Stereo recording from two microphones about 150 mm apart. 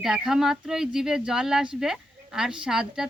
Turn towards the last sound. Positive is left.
turn(degrees=-5)  # may be behind; listen again after turning